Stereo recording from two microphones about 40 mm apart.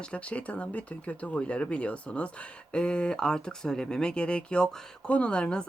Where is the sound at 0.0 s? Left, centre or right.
Left.